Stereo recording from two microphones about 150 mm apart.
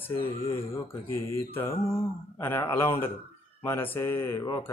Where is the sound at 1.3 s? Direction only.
15° left (ahead or behind).